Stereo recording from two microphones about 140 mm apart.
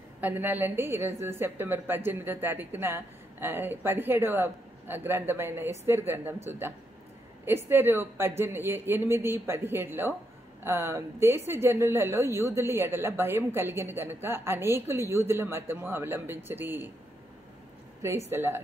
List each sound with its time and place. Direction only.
0.2 s a woman's voice: 15° right (ahead or behind)
18.3 s a woman's voice: 15° right (ahead or behind)